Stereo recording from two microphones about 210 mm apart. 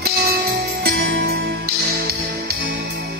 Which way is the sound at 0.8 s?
50° right (ahead or behind).